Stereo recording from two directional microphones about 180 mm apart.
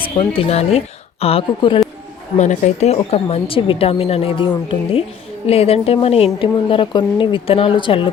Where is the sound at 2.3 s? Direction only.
40° left (ahead or behind).